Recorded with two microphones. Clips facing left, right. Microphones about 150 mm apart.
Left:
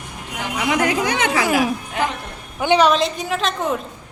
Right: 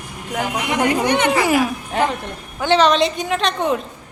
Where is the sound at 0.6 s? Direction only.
90° left.